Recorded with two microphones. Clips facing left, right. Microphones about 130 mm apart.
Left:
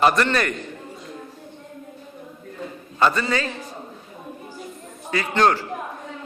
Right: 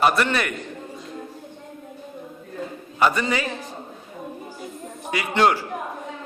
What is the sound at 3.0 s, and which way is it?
Speech, 15° right (ahead or behind).